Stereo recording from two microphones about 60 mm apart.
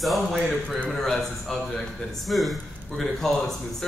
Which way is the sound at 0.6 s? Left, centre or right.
Centre.